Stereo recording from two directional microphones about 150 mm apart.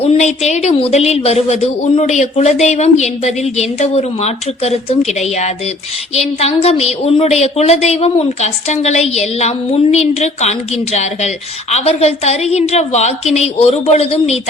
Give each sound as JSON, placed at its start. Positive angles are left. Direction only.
{"t": 0.0, "sound": "speech", "side_deg": 45}